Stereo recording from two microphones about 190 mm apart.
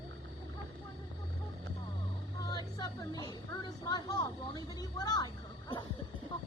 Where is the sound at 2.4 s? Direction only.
20° left (ahead or behind).